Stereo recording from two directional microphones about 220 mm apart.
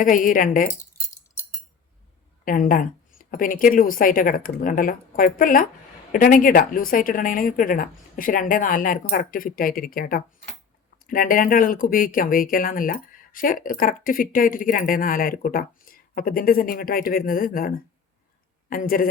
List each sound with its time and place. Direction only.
0.0 s speech: 40° left (ahead or behind)
2.4 s speech: 40° left (ahead or behind)